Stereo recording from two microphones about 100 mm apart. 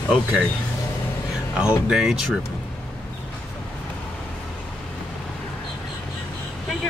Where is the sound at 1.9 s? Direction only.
5° right (ahead or behind).